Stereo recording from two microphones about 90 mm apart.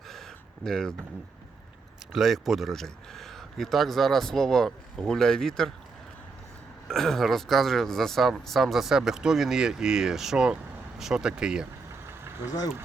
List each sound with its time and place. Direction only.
0.1 s a sound: 5° left (ahead or behind)
2.1 s speech: centre (ahead or behind)
6.8 s speech: 5° left (ahead or behind)
11.9 s vehicle: 30° right (ahead or behind)